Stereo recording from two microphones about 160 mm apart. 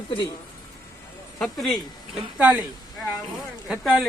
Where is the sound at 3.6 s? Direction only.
5° right (ahead or behind).